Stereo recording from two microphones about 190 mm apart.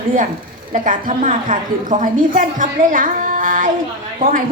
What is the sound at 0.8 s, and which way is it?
A woman's voice, 40° right (ahead or behind).